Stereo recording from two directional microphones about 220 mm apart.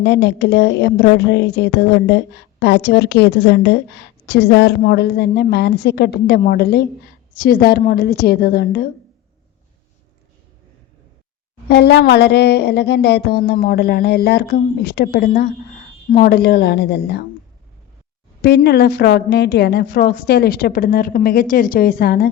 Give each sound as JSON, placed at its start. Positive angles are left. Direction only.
{"t": 0.0, "sound": "a woman's voice", "side_deg": 50}
{"t": 11.7, "sound": "a woman's voice", "side_deg": 50}
{"t": 18.4, "sound": "a woman's voice", "side_deg": 45}